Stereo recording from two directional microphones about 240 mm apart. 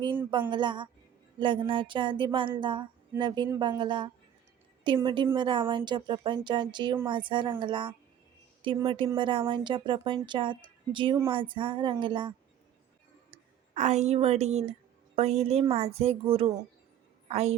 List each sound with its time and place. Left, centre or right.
0.2 s speech: centre
13.7 s a woman's voice: right